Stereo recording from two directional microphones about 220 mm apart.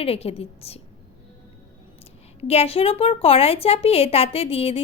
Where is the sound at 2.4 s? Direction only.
30° left (ahead or behind).